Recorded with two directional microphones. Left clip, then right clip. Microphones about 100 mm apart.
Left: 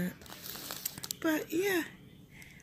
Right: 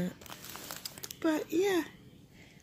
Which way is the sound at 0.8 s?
30° right (ahead or behind).